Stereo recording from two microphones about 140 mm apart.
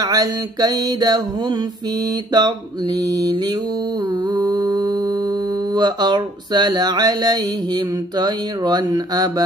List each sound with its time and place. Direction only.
0.0 s music: 30° right (ahead or behind)
4.0 s mantra: 30° right (ahead or behind)